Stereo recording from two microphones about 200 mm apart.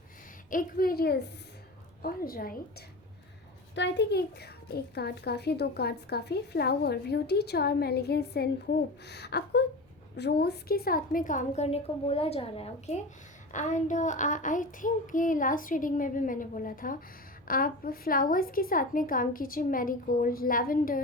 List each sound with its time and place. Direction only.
0.5 s a child's voice: 45° left (ahead or behind)
3.8 s a child's voice: 60° left (ahead or behind)
10.2 s child singing: 55° left (ahead or behind)
17.5 s a child's voice: 45° left (ahead or behind)